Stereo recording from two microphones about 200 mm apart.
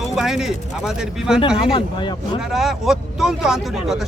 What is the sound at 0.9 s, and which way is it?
Speech, 5° right (ahead or behind).